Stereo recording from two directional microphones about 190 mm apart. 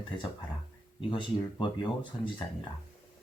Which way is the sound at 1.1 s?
25° left (ahead or behind).